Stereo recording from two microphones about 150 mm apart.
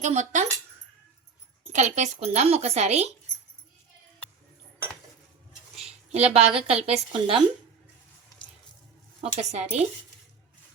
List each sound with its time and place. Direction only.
0.0 s speech: 50° right (ahead or behind)
1.7 s speech: 50° right (ahead or behind)
5.7 s a woman's voice: 45° right (ahead or behind)
9.2 s speech: 50° right (ahead or behind)